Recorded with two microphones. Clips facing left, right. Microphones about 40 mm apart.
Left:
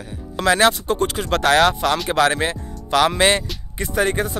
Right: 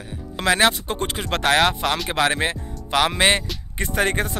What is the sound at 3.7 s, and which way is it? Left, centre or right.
Speech, right.